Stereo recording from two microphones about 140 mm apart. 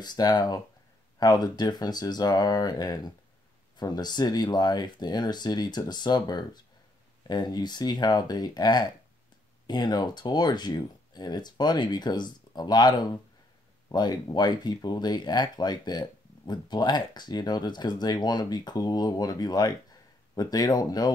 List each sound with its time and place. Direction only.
0.0 s speech: 30° left (ahead or behind)